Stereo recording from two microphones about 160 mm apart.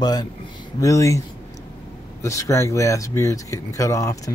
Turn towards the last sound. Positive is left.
turn(degrees=20)  # may be behind; listen again after turning